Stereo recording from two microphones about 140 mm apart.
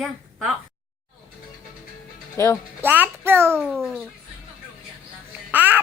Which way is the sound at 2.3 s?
20° left (ahead or behind).